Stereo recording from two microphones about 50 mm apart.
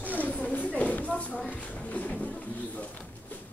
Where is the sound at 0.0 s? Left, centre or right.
Left.